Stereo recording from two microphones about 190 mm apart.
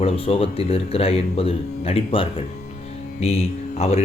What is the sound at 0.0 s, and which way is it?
A man's voice, 30° left (ahead or behind).